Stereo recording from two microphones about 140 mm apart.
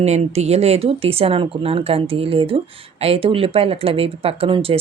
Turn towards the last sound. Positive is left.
turn(degrees=-40)  # may be behind; listen again after turning